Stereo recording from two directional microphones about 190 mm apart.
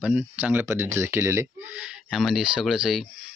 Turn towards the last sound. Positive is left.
turn(degrees=0)  # may be behind; listen again after turning